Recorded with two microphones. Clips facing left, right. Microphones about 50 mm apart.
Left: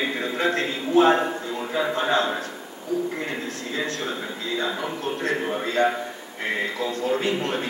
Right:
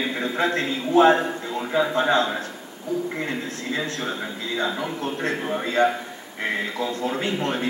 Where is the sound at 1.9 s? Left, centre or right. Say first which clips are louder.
Right 1 dB; right.